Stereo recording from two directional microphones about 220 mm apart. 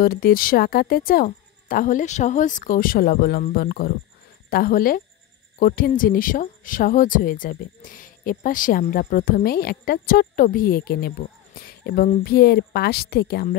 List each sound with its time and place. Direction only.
0.0 s speech: 40° left (ahead or behind)